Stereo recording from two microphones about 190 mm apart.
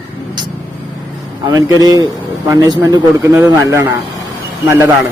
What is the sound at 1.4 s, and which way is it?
A man's voice, 20° right (ahead or behind).